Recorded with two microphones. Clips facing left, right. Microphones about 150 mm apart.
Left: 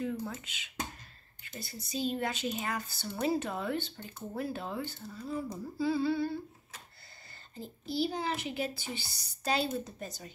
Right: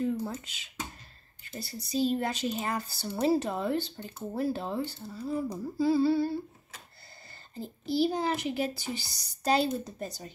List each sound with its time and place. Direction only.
0.0 s speech: 35° right (ahead or behind)
7.8 s speech: 40° right (ahead or behind)